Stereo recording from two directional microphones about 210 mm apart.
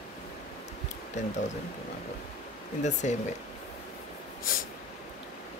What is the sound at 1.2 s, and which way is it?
Speech, 35° left (ahead or behind).